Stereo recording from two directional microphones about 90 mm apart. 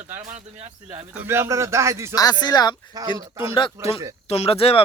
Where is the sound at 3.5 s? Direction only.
65° left (ahead or behind).